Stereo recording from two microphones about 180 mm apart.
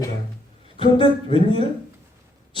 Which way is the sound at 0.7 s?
30° left (ahead or behind).